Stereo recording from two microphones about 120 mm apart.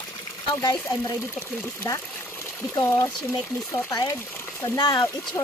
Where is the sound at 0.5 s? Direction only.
30° left (ahead or behind).